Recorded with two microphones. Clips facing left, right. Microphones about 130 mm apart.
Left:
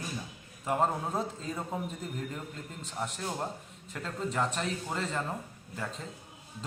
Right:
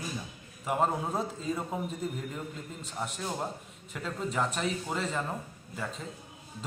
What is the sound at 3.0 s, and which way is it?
A man's voice, 5° right (ahead or behind).